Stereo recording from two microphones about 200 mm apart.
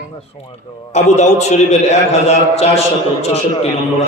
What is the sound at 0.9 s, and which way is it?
A man's voice, 35° left (ahead or behind).